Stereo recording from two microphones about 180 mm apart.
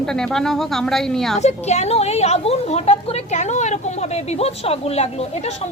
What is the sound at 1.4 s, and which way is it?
A woman's voice, 40° left (ahead or behind).